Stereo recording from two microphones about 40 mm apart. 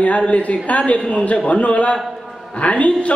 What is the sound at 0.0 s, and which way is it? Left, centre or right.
A man's voice, left.